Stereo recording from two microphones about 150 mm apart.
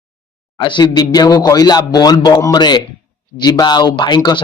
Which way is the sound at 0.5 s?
30° left (ahead or behind).